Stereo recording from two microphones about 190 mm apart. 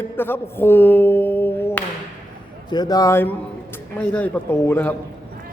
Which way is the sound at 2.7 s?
20° left (ahead or behind).